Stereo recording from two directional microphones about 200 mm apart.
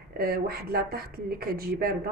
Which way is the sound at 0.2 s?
50° right (ahead or behind).